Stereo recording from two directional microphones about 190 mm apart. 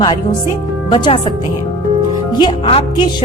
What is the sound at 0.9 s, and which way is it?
Speech, 25° left (ahead or behind).